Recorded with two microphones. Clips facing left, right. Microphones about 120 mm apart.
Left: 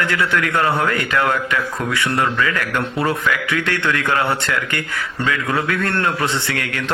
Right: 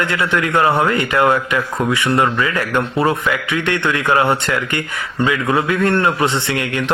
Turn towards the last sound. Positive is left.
turn(degrees=-20)  # may be behind; listen again after turning